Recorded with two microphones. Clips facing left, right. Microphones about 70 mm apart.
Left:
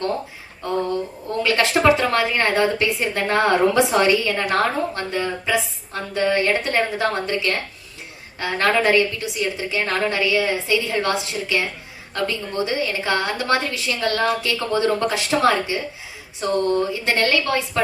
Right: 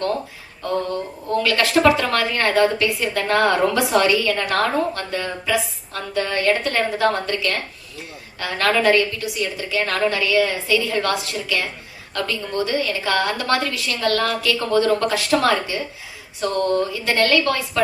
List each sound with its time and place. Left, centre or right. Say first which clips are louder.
1.4 s a woman's voice: right 1 dB; left